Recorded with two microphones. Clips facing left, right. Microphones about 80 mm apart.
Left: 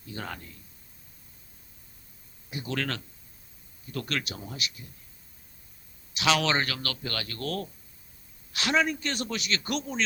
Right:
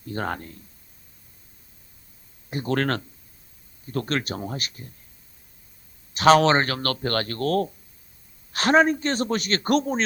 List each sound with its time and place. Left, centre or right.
0.1 s speech: right
2.5 s speech: right
6.1 s a man's voice: right